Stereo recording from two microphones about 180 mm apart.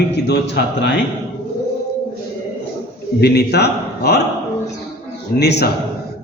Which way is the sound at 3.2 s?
65° left (ahead or behind).